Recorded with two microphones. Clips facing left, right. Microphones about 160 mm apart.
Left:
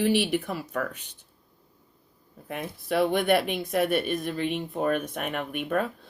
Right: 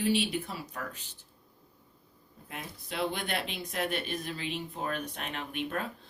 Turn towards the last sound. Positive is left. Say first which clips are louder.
# left 7 dB
turn(degrees=55)  # may be behind; listen again after turning